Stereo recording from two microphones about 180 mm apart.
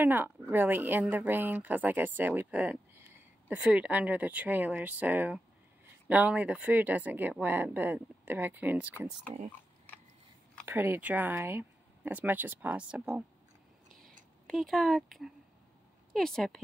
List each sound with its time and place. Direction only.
0.0 s speech: 10° right (ahead or behind)
10.6 s speech: 10° right (ahead or behind)
13.9 s a sound: 50° right (ahead or behind)
14.5 s speech: centre (ahead or behind)